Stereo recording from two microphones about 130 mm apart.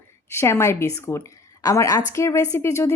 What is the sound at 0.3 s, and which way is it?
A woman's voice, 20° left (ahead or behind).